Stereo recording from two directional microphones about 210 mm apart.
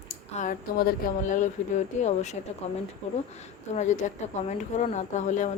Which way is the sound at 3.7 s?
35° left (ahead or behind).